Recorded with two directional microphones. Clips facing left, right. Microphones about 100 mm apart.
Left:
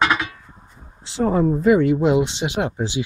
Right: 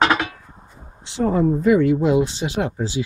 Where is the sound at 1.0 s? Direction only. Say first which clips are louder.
Even; 35° left (ahead or behind).